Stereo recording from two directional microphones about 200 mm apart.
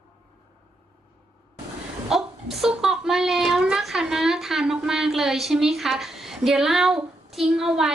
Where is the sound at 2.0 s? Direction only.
Centre (ahead or behind).